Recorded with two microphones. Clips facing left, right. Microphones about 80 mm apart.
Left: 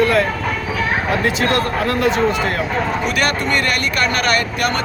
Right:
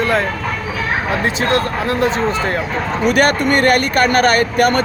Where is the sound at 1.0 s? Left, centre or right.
Right.